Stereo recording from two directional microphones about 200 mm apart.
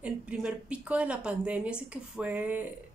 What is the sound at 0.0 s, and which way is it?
A woman's voice, 5° right (ahead or behind).